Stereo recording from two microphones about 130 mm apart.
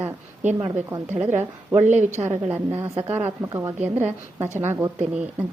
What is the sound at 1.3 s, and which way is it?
Speech, 15° right (ahead or behind).